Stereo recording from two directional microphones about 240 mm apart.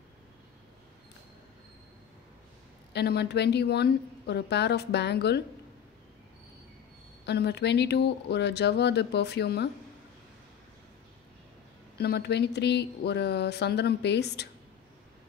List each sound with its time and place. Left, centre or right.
2.9 s a woman's voice: left
7.2 s a woman's voice: left
12.0 s a woman's voice: left